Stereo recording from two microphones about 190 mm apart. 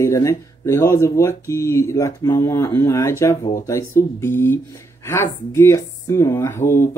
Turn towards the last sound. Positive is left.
turn(degrees=15)  # may be behind; listen again after turning